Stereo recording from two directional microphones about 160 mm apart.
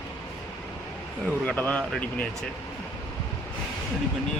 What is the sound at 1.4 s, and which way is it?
Speech, 10° left (ahead or behind).